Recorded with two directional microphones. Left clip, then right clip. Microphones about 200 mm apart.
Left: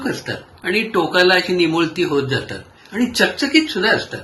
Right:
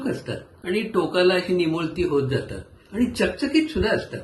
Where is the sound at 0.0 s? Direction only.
Centre (ahead or behind).